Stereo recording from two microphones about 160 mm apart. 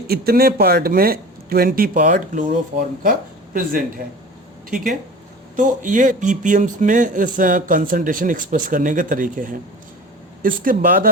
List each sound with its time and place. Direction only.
0.1 s speech: 75° right (ahead or behind)